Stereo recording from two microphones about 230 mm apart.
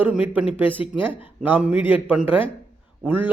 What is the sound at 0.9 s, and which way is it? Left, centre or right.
Speech, centre.